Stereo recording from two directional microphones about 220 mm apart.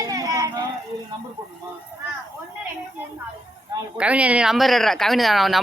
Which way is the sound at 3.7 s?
5° right (ahead or behind).